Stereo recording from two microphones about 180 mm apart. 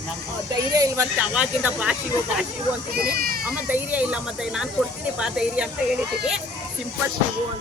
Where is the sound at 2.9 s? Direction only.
55° right (ahead or behind).